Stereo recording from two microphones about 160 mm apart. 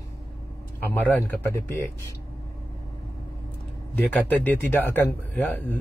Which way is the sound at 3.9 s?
10° left (ahead or behind).